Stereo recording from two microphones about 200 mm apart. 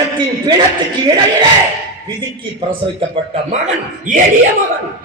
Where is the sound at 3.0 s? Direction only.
30° right (ahead or behind).